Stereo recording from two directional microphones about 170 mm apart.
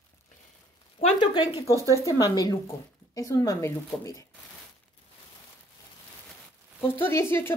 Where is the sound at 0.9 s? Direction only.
35° left (ahead or behind).